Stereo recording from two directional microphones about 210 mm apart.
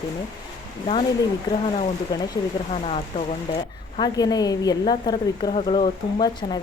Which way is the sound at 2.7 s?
30° left (ahead or behind).